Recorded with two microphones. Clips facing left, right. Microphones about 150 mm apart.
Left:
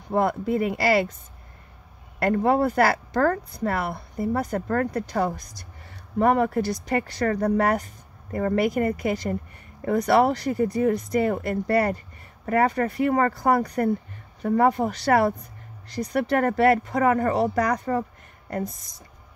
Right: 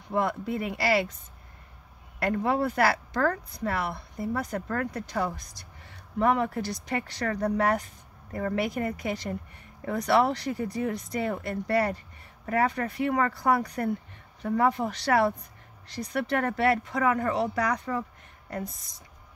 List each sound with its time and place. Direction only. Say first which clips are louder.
0.1 s a woman's voice: left 5 dB; 45° left (ahead or behind)
2.1 s a woman's voice: left 5 dB; 45° left (ahead or behind)